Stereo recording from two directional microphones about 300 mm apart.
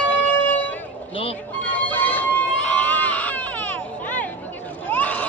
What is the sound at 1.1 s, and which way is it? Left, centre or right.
Speech, centre.